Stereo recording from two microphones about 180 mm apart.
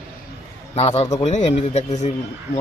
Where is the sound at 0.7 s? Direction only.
35° left (ahead or behind).